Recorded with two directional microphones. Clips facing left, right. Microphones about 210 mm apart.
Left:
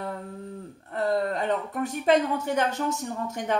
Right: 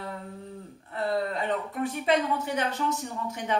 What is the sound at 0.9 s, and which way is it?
A woman's voice, 45° left (ahead or behind).